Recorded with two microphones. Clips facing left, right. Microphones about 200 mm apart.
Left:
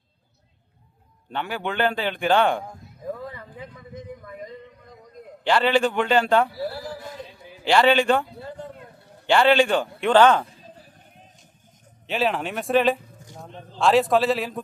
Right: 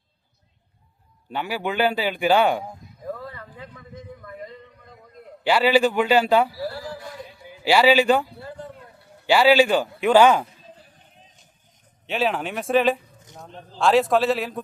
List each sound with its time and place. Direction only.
1.3 s a man's voice: 5° right (ahead or behind)
3.1 s a sound: 15° left (ahead or behind)
5.4 s a man's voice: 5° right (ahead or behind)
6.6 s a sound: 20° left (ahead or behind)
7.6 s a man's voice: 5° right (ahead or behind)
12.0 s a man's voice: centre (ahead or behind)